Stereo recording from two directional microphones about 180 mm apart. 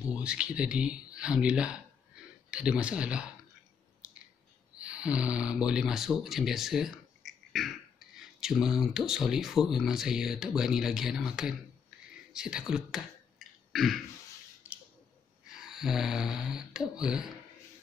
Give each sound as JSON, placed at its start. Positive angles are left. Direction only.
{"t": 0.0, "sound": "speech", "side_deg": -5}
{"t": 4.0, "sound": "a sound", "side_deg": -5}
{"t": 4.7, "sound": "speech", "side_deg": -5}
{"t": 15.5, "sound": "speech", "side_deg": 0}